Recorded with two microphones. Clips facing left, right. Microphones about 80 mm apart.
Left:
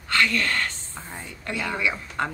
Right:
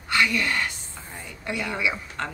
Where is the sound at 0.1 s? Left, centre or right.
Centre.